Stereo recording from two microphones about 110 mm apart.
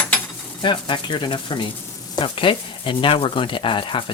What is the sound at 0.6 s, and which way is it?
Speech, 45° left (ahead or behind).